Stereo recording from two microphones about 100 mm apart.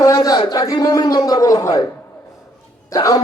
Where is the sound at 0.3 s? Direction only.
40° left (ahead or behind).